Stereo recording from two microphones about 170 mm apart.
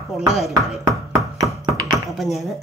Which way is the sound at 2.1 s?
Centre (ahead or behind).